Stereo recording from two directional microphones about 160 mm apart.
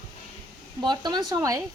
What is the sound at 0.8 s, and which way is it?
Speech, 25° right (ahead or behind).